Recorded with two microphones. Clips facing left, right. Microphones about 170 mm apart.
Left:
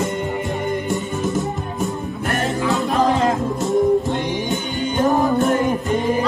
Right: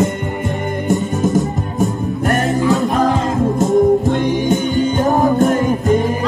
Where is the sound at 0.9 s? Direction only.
45° right (ahead or behind).